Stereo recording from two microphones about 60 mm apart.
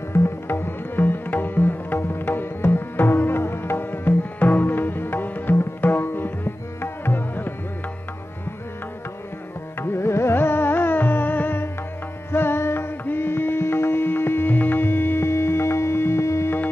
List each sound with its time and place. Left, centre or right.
0.1 s music: left
9.8 s music: left